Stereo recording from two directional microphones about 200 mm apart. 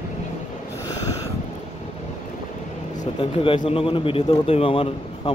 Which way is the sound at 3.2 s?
25° left (ahead or behind).